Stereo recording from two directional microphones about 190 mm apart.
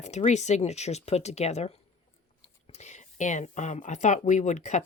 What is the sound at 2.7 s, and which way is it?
Speech, 35° left (ahead or behind).